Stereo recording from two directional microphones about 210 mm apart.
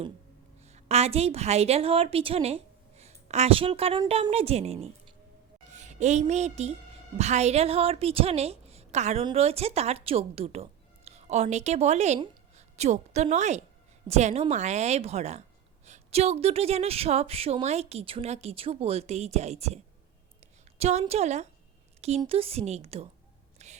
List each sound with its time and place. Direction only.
0.9 s a woman's voice: 30° right (ahead or behind)
23.6 s whispering: 30° right (ahead or behind)